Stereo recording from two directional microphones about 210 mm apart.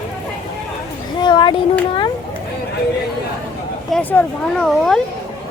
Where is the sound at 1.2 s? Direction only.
20° left (ahead or behind).